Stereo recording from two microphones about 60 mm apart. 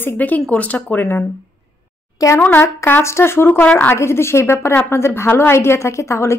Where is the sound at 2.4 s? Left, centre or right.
Left.